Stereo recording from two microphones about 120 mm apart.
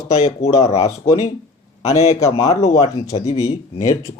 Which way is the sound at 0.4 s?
65° left (ahead or behind).